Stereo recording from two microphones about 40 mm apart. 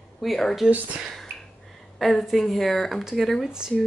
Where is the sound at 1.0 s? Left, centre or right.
Centre.